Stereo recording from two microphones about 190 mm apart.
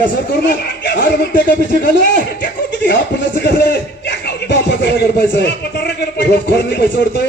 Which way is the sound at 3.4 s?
60° left (ahead or behind).